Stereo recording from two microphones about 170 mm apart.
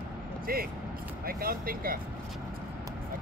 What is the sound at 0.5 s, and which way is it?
Speech, 60° right (ahead or behind).